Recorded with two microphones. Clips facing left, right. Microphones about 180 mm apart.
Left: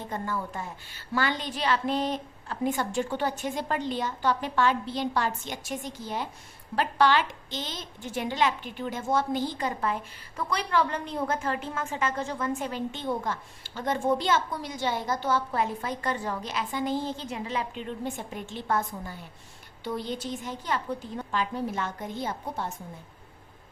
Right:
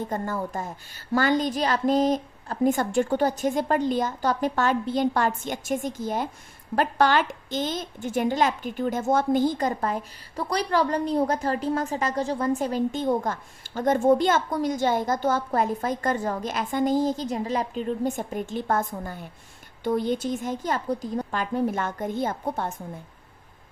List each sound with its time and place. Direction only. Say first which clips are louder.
0.1 s a woman's voice: right 4 dB; 45° right (ahead or behind)